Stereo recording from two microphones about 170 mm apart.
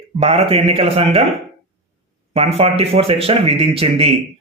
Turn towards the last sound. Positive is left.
turn(degrees=-35)  # may be behind; listen again after turning